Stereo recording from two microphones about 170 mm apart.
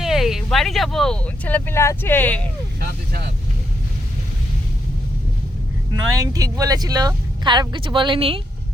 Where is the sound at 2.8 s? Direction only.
65° right (ahead or behind).